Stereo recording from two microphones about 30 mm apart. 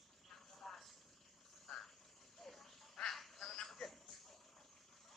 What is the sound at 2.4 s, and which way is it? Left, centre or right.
Dog, centre.